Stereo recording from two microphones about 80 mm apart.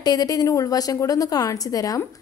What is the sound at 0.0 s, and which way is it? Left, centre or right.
A woman's voice, left.